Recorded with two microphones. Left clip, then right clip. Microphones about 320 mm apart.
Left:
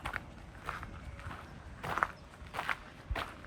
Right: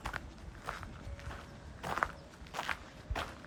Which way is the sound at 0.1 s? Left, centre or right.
Centre.